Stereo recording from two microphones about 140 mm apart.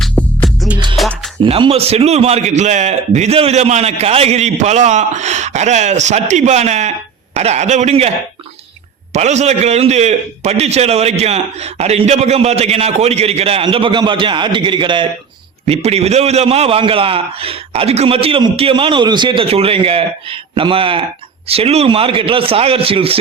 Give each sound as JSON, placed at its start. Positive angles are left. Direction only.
{"t": 0.0, "sound": "music", "side_deg": 0}
{"t": 1.4, "sound": "a man's voice", "side_deg": -40}
{"t": 9.1, "sound": "a man's voice", "side_deg": -55}
{"t": 15.6, "sound": "a man's voice", "side_deg": -50}